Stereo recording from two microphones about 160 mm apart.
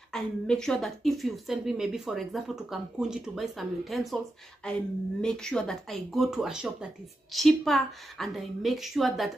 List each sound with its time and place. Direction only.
0.1 s a woman's voice: 5° left (ahead or behind)